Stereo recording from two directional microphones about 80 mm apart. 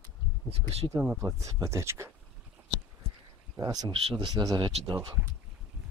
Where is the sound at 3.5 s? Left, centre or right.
Right.